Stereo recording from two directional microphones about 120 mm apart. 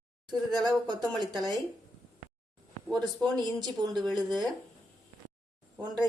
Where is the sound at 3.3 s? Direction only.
35° right (ahead or behind).